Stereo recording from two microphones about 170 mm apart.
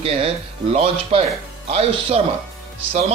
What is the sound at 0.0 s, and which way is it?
Speech, 35° right (ahead or behind).